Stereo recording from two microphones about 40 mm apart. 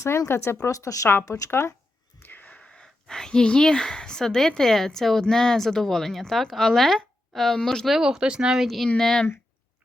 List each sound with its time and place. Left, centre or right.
0.3 s speech: left
2.1 s wheeze: left
2.8 s a woman's voice: centre
7.9 s speech: centre
8.2 s speech: right
8.6 s a woman's voice: centre